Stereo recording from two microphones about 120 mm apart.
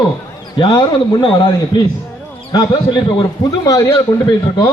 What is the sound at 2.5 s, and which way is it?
Speech, 40° left (ahead or behind).